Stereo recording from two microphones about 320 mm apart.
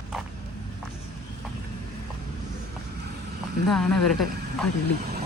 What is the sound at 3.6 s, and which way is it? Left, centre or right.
Speech, centre.